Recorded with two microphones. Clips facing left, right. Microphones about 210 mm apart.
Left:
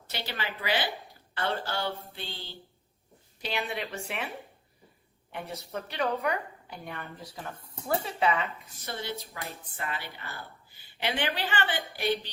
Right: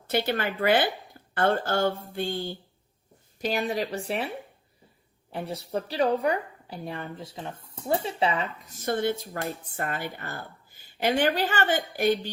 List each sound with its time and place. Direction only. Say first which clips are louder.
0.1 s a woman's voice: right 10 dB; 50° right (ahead or behind); by 4.3 s 35° right (ahead or behind)
5.3 s a woman's voice: right 6 dB; 30° right (ahead or behind)
8.6 s speech: right 11 dB; 45° right (ahead or behind)